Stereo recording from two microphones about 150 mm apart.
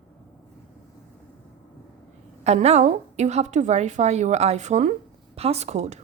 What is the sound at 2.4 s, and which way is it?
Speech, 45° right (ahead or behind).